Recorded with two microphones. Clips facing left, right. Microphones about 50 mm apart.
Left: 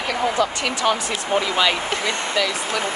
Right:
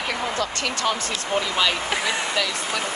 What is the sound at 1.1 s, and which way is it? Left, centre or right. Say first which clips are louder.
Speech: left 3 dB; left.